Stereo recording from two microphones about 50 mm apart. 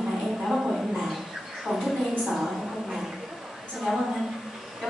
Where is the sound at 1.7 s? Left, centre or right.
Centre.